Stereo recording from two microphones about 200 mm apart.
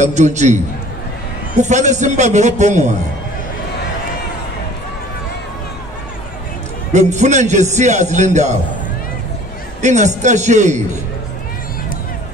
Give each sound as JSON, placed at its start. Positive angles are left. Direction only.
{"t": 0.0, "sound": "a man's voice", "side_deg": -35}
{"t": 1.6, "sound": "a man's voice", "side_deg": -35}
{"t": 6.9, "sound": "a man's voice", "side_deg": -35}
{"t": 9.8, "sound": "a man's voice", "side_deg": -35}